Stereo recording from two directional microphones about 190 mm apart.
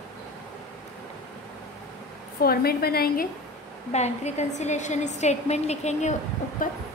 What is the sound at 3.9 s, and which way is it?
A woman's voice, 35° left (ahead or behind).